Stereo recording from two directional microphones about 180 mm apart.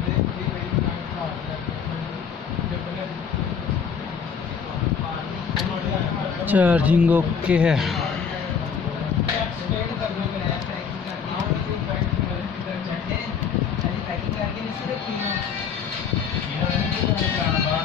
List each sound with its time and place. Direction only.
6.4 s a man's voice: 10° right (ahead or behind)